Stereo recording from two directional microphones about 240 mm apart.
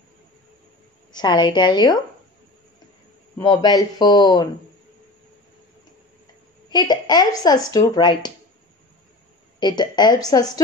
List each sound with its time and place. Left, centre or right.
1.1 s speech: centre
3.3 s speech: centre
6.7 s speech: centre
9.6 s speech: centre